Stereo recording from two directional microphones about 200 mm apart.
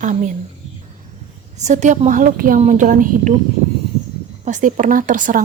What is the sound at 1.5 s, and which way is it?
Speech, 35° right (ahead or behind).